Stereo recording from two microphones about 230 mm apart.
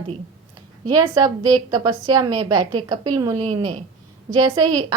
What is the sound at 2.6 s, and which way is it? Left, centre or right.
Speech, right.